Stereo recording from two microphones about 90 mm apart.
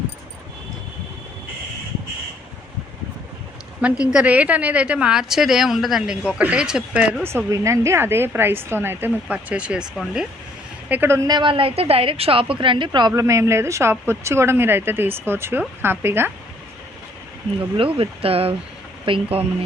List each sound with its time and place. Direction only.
4.0 s a woman's voice: 10° right (ahead or behind)
7.3 s a woman's voice: 30° right (ahead or behind)
9.3 s a woman's voice: 15° right (ahead or behind)
10.8 s speech: 20° right (ahead or behind)
11.3 s a woman's voice: 60° right (ahead or behind)
13.1 s a woman's voice: 35° right (ahead or behind)
17.7 s speech: 85° right